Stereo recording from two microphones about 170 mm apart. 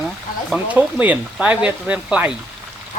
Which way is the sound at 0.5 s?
10° right (ahead or behind).